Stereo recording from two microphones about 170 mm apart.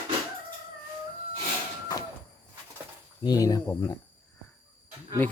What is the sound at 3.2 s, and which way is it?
Speech, 20° left (ahead or behind).